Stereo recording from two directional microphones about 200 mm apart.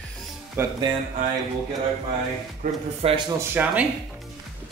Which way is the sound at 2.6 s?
30° right (ahead or behind).